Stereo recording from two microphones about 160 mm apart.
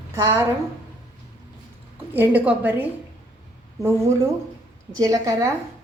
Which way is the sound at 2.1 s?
10° right (ahead or behind).